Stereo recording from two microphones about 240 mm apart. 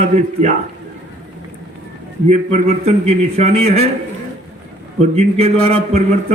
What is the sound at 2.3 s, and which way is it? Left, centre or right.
A man's voice, right.